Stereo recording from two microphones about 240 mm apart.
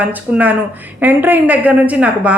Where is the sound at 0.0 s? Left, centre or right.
Centre.